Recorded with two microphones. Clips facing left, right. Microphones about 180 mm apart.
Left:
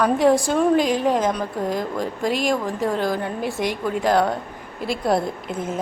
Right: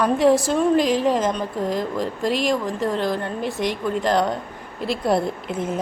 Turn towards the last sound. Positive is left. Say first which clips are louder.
# right 1 dB
turn(degrees=0)  # may be behind; listen again after turning